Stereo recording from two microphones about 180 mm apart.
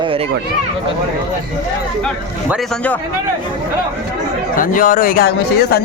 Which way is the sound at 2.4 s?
Centre (ahead or behind).